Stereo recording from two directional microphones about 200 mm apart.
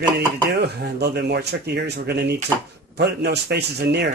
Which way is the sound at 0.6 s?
55° right (ahead or behind).